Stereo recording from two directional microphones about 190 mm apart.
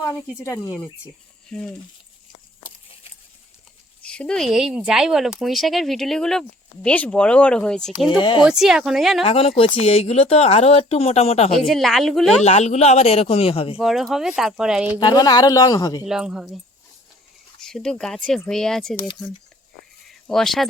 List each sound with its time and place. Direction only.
0.3 s speech: 15° left (ahead or behind)
1.5 s speech: 5° left (ahead or behind)
4.0 s speech: 5° left (ahead or behind)
8.1 s speech: 25° left (ahead or behind)
8.4 s speech: centre (ahead or behind)
9.2 s speech: 30° left (ahead or behind)
11.6 s speech: centre (ahead or behind)
12.4 s speech: 35° left (ahead or behind)
13.7 s speech: centre (ahead or behind)
14.9 s speech: 20° left (ahead or behind)
16.0 s speech: 5° right (ahead or behind)
17.6 s speech: 5° left (ahead or behind)
20.2 s speech: 5° left (ahead or behind)